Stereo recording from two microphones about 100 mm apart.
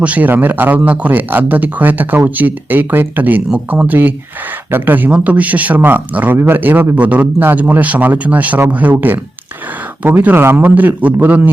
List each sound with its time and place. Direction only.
0.0 s a man's voice: 15° right (ahead or behind)